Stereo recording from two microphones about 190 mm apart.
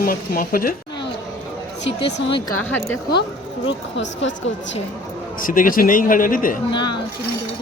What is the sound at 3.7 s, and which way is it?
Speech, 70° left (ahead or behind).